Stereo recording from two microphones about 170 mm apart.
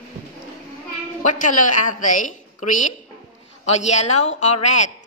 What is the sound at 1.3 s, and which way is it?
A woman's voice, 50° left (ahead or behind).